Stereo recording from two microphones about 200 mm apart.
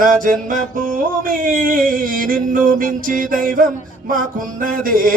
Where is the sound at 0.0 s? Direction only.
45° right (ahead or behind).